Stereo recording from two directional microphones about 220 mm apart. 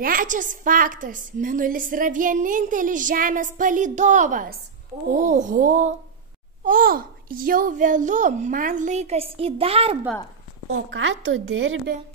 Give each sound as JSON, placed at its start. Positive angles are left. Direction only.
{"t": 0.0, "sound": "a woman's voice", "side_deg": -40}
{"t": 10.7, "sound": "speech", "side_deg": -60}